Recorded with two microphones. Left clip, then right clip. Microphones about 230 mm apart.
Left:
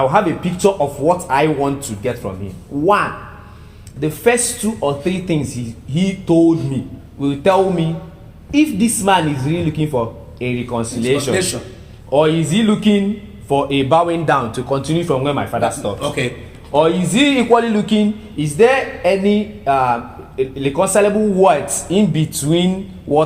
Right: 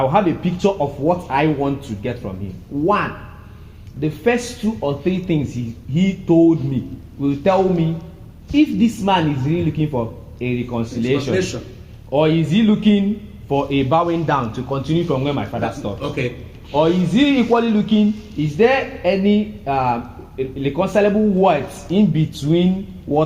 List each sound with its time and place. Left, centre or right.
0.0 s a man's voice: left
4.0 s a man's voice: left